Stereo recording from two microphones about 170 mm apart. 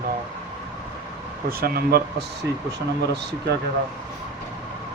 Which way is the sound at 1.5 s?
60° right (ahead or behind).